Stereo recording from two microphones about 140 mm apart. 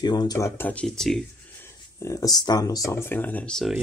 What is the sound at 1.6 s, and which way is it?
Speech, 20° left (ahead or behind).